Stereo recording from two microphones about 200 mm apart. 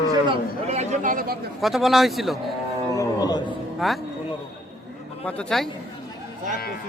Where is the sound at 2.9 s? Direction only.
15° left (ahead or behind).